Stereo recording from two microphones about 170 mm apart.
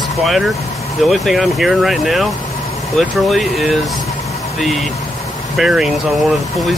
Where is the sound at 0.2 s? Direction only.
Centre (ahead or behind).